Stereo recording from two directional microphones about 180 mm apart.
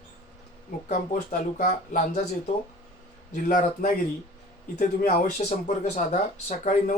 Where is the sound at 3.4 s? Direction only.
45° left (ahead or behind).